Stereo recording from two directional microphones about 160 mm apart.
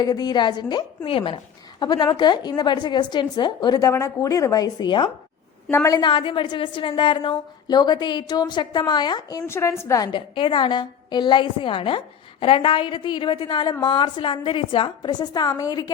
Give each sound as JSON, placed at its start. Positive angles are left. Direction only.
{"t": 0.0, "sound": "a woman's voice", "side_deg": 25}
{"t": 10.1, "sound": "a woman's voice", "side_deg": 30}